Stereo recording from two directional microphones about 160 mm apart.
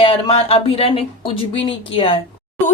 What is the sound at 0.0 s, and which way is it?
Speech, 35° left (ahead or behind).